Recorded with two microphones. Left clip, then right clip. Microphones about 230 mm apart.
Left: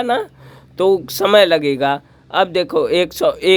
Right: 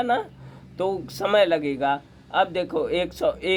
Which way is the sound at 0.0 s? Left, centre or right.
Left.